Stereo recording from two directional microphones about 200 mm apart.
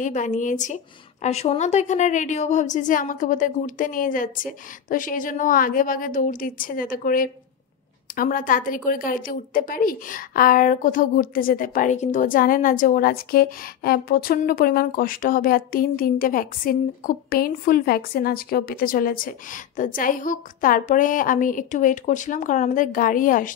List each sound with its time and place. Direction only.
0.0 s a woman's voice: 40° left (ahead or behind)